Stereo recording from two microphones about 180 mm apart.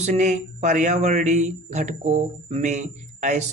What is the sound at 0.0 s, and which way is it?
A man's voice, 40° right (ahead or behind).